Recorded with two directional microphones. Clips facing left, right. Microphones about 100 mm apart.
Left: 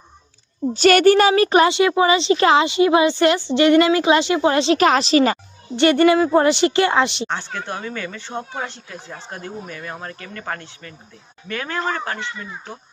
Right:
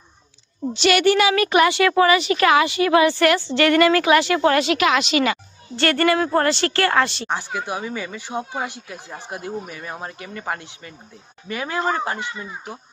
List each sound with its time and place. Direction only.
0.7 s a child's voice: 45° left (ahead or behind)
1.7 s a woman's voice: 20° left (ahead or behind); by 5.4 s 35° left (ahead or behind)
5.7 s a woman's voice: 20° left (ahead or behind)
6.1 s speech: 5° left (ahead or behind)
6.4 s a woman's voice: 15° left (ahead or behind)
7.3 s speech: 10° right (ahead or behind)